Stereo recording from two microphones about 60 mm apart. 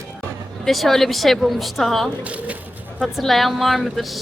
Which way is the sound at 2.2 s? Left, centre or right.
Right.